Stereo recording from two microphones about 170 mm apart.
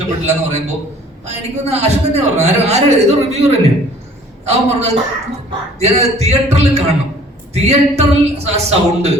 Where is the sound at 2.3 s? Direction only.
40° right (ahead or behind).